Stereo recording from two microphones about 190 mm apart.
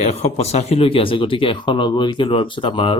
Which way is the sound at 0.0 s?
35° left (ahead or behind).